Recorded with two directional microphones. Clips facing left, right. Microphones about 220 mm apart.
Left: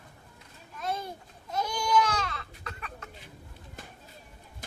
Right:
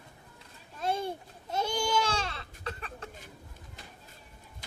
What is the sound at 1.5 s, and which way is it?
Baby cry, 30° right (ahead or behind).